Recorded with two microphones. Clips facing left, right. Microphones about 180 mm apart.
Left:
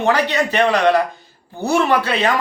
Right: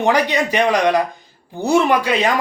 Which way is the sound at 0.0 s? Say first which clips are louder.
Right 1 dB; 15° right (ahead or behind).